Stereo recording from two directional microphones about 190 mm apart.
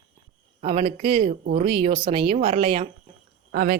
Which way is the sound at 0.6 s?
35° right (ahead or behind).